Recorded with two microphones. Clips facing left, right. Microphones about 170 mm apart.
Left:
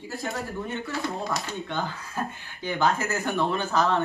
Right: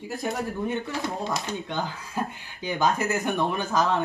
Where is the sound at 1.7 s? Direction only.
15° right (ahead or behind).